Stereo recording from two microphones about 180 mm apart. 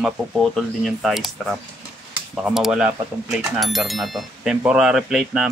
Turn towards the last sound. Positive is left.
turn(degrees=-5)  # may be behind; listen again after turning